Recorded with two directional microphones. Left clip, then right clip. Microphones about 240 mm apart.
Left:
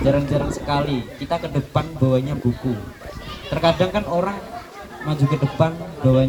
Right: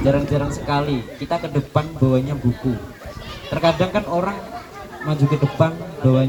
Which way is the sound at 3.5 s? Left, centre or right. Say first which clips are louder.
Even; left.